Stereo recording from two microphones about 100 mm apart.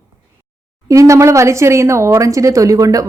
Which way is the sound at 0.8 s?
30° right (ahead or behind).